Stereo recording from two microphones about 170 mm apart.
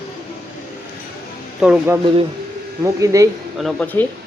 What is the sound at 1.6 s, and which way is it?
Speech, 10° right (ahead or behind).